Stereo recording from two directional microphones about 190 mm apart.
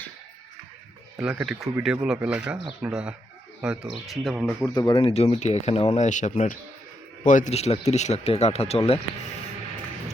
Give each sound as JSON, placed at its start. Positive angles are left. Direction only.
{"t": 1.1, "sound": "speech", "side_deg": -5}
{"t": 4.6, "sound": "speech", "side_deg": 20}
{"t": 5.1, "sound": "speech", "side_deg": 35}